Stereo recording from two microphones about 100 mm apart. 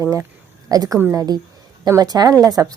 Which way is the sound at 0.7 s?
35° right (ahead or behind).